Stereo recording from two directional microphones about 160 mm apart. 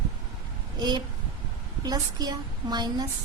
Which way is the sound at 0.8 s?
25° right (ahead or behind).